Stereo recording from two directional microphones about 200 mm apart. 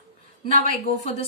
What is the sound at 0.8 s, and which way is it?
Speech, 30° left (ahead or behind).